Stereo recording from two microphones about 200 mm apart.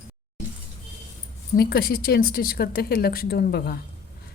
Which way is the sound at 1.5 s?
50° left (ahead or behind).